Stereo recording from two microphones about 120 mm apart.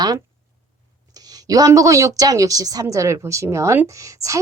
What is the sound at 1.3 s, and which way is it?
Speech, 30° right (ahead or behind).